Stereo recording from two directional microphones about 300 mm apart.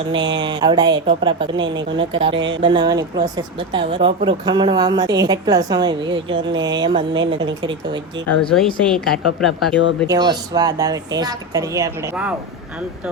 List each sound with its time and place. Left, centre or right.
0.1 s speech: centre
2.3 s speech: right
2.6 s speech: centre
8.5 s speech: centre
10.1 s speech: centre